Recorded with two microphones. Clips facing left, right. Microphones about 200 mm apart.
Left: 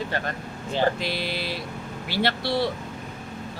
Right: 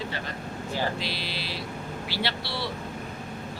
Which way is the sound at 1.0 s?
50° left (ahead or behind).